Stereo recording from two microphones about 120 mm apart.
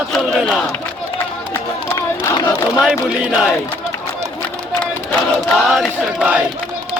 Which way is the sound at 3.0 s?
5° right (ahead or behind).